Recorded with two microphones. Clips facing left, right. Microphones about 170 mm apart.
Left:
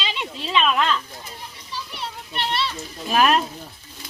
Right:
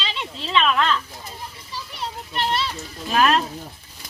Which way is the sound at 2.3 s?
40° right (ahead or behind).